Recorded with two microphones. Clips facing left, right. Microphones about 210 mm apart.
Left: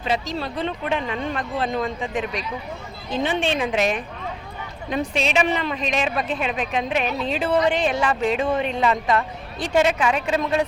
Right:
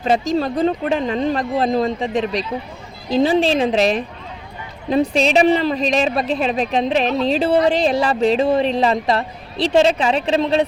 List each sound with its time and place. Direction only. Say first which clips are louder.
0.0 s speech: right 7 dB; 45° right (ahead or behind)